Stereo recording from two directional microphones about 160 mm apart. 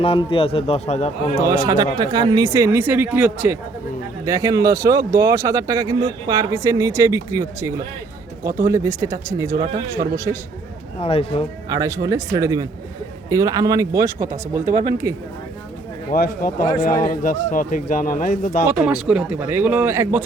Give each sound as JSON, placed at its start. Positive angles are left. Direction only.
{"t": 0.0, "sound": "a man's voice", "side_deg": 35}
{"t": 1.4, "sound": "speech", "side_deg": -20}
{"t": 4.3, "sound": "speech", "side_deg": -20}
{"t": 11.0, "sound": "a man's voice", "side_deg": 40}
{"t": 11.7, "sound": "speech", "side_deg": -20}
{"t": 16.1, "sound": "a man's voice", "side_deg": 60}
{"t": 18.7, "sound": "speech", "side_deg": -5}